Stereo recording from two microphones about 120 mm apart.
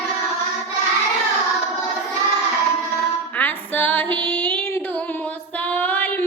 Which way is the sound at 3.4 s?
15° left (ahead or behind).